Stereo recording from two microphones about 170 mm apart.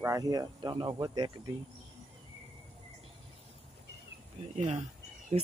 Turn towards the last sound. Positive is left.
turn(degrees=-35)  # may be behind; listen again after turning